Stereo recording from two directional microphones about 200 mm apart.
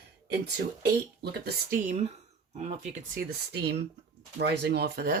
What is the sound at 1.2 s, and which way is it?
Speech, 55° right (ahead or behind).